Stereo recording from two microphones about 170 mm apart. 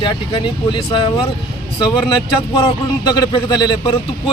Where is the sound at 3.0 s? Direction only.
25° left (ahead or behind).